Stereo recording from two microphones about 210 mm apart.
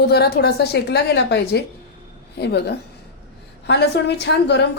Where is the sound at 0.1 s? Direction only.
50° left (ahead or behind).